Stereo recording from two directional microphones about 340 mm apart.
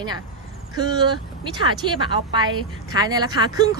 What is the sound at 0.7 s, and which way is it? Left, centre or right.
Speech, centre.